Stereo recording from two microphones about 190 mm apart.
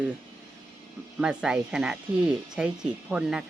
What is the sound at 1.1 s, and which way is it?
Speech, 5° right (ahead or behind).